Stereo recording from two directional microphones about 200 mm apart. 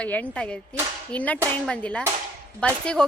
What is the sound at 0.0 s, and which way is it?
Speech, 5° left (ahead or behind).